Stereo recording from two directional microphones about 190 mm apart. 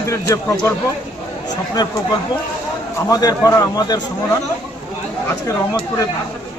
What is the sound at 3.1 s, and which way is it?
Speech, 20° left (ahead or behind).